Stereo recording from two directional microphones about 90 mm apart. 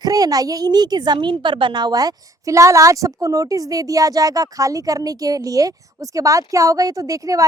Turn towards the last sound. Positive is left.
turn(degrees=-40)  # may be behind; listen again after turning